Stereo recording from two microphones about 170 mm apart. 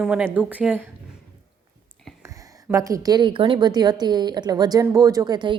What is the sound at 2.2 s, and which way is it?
Speech, 20° right (ahead or behind).